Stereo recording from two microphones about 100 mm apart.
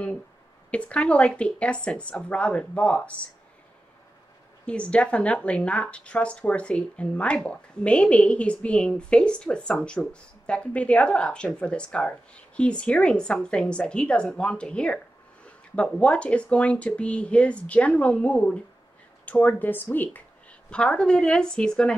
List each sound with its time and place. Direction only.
0.7 s a woman's voice: 10° left (ahead or behind)
4.6 s a woman's voice: 10° left (ahead or behind)